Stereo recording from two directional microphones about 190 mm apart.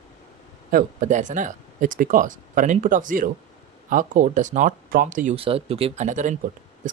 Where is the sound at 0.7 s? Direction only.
45° right (ahead or behind).